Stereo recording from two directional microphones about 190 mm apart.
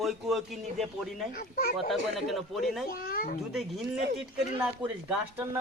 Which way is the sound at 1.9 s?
Centre (ahead or behind).